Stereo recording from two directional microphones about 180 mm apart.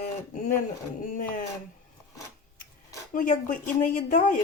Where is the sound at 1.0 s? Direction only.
50° left (ahead or behind).